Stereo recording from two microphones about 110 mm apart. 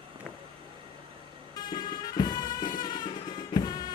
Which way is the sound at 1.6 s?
40° left (ahead or behind).